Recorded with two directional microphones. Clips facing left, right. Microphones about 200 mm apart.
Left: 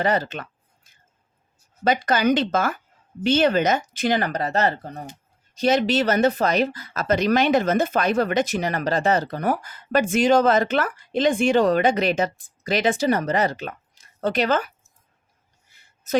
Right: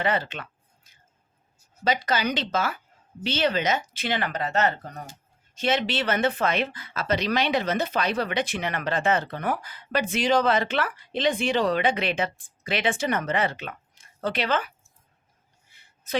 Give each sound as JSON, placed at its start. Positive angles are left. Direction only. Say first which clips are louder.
{"t": 0.0, "sound": "speech", "louder": "left 4 dB", "side_deg": 40}
{"t": 1.8, "sound": "speech", "louder": "left 5 dB", "side_deg": 50}